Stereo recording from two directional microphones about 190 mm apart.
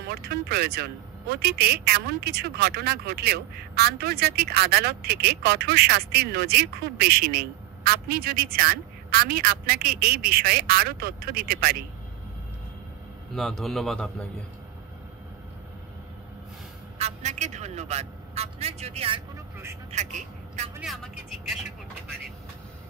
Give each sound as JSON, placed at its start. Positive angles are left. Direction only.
{"t": 0.0, "sound": "speech", "side_deg": -60}
{"t": 13.3, "sound": "a man's voice", "side_deg": 0}
{"t": 17.0, "sound": "a man's voice", "side_deg": -40}
{"t": 19.3, "sound": "speech", "side_deg": -15}
{"t": 19.9, "sound": "a woman's voice", "side_deg": -40}
{"t": 20.8, "sound": "a man's voice", "side_deg": 0}